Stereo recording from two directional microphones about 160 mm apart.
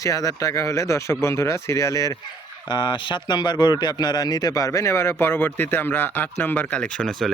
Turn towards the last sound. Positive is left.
turn(degrees=5)  # may be behind; listen again after turning